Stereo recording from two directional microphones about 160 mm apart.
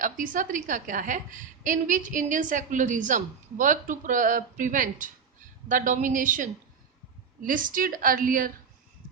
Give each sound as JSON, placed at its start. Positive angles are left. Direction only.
{"t": 0.0, "sound": "a woman's voice", "side_deg": -55}